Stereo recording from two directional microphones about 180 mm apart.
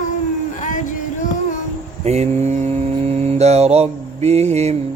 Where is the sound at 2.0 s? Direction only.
35° right (ahead or behind).